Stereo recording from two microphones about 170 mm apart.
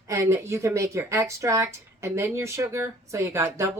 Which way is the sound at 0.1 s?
15° right (ahead or behind).